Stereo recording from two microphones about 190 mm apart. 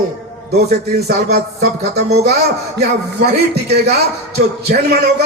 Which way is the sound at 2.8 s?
60° right (ahead or behind).